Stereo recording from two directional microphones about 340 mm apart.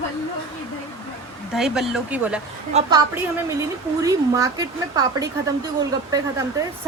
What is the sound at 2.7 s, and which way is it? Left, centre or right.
Speech, centre.